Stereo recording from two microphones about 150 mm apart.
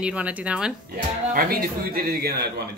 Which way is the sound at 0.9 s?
75° right (ahead or behind).